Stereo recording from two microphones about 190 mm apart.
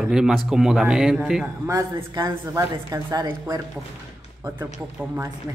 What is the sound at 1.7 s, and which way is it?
A woman's voice, 20° right (ahead or behind).